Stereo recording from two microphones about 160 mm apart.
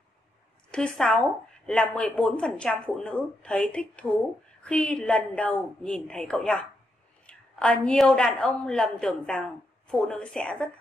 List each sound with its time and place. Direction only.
0.7 s a woman's voice: 5° left (ahead or behind)